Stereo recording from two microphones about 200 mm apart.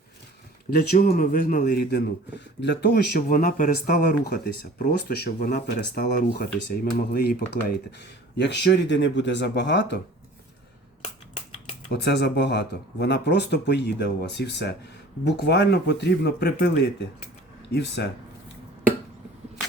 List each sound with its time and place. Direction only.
0.9 s speech: 50° left (ahead or behind)
11.9 s speech: 55° left (ahead or behind)
17.7 s speech: 55° left (ahead or behind)